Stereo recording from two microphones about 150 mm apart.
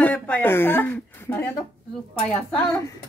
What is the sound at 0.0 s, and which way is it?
Speech, 10° left (ahead or behind).